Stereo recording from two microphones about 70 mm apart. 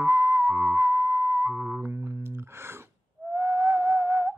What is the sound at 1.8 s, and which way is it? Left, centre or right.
Music, right.